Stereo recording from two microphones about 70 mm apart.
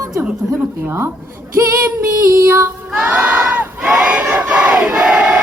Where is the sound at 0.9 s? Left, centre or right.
Right.